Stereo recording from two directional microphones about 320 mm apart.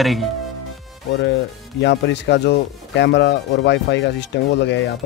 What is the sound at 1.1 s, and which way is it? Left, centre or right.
Speech, left.